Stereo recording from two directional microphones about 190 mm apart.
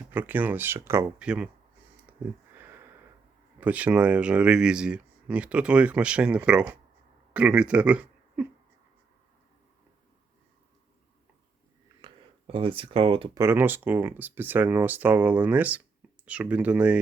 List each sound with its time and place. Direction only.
0.1 s speech: 10° right (ahead or behind)
2.1 s a sound: 5° right (ahead or behind)
2.6 s sniff: 10° right (ahead or behind)
3.6 s speech: 5° right (ahead or behind)
12.0 s speech: 25° right (ahead or behind)
13.4 s speech: 10° right (ahead or behind)